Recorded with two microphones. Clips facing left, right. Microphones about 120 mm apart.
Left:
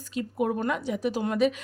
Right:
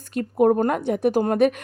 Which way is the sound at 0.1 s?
55° right (ahead or behind).